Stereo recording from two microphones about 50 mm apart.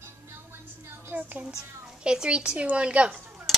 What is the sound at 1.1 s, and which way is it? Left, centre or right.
Speech, right.